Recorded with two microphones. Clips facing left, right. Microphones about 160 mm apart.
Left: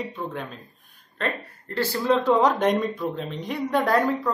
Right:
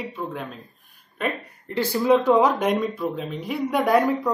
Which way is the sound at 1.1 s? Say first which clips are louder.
Right 1 dB; 15° right (ahead or behind).